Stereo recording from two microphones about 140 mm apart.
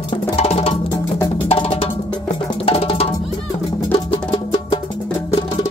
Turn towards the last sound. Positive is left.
turn(degrees=40)  # may be behind; listen again after turning